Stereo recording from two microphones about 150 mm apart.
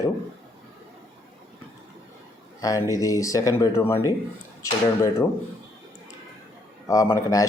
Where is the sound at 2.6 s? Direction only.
25° left (ahead or behind).